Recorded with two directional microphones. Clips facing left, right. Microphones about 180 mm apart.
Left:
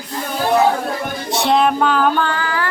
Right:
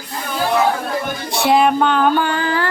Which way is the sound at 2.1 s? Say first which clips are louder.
Right 2 dB; 20° right (ahead or behind).